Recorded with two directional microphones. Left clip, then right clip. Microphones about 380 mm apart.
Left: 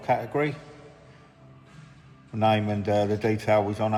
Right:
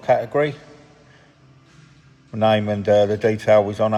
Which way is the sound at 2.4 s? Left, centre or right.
Right.